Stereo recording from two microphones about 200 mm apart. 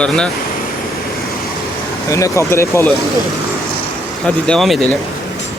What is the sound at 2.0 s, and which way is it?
Speech, 15° left (ahead or behind).